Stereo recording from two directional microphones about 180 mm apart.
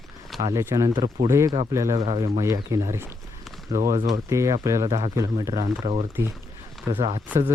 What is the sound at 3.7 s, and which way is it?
Speech, 45° right (ahead or behind).